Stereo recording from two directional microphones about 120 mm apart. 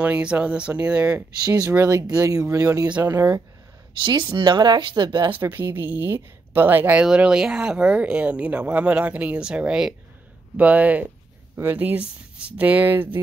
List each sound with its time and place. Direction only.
0.0 s speech: 10° right (ahead or behind)
1.5 s speech: 30° right (ahead or behind)
4.0 s speech: 40° right (ahead or behind)
5.4 s speech: 15° right (ahead or behind)